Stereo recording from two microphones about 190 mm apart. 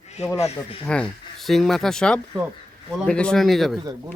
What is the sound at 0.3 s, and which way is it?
Speech, 35° left (ahead or behind).